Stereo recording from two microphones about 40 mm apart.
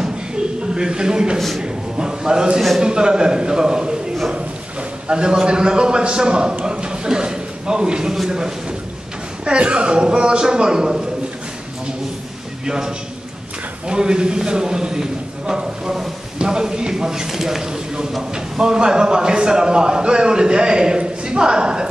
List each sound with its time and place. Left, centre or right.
0.7 s a man's voice: centre
5.0 s a man's voice: right
12.6 s a man's voice: centre